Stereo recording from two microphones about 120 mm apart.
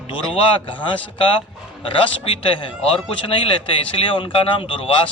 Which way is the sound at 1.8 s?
45° left (ahead or behind).